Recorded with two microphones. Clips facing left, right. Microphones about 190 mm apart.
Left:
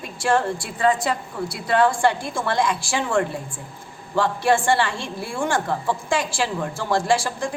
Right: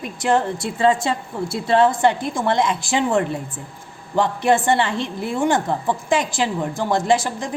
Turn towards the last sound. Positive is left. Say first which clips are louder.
# right 2 dB
turn(degrees=-20)  # may be behind; listen again after turning